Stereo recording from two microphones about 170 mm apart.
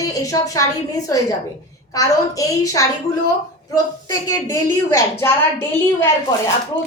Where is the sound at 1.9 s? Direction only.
20° left (ahead or behind).